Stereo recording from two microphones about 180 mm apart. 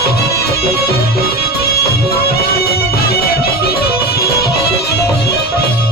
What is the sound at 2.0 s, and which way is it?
Music, 60° left (ahead or behind).